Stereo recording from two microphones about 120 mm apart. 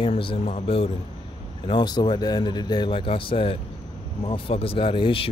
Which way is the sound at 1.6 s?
40° left (ahead or behind).